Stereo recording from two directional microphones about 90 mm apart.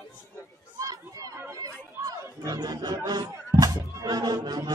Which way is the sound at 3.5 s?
45° right (ahead or behind).